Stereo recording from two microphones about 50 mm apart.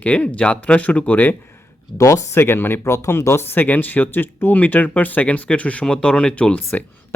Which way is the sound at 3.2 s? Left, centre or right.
Left.